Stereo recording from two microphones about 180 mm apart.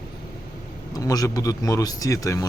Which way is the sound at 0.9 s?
20° left (ahead or behind).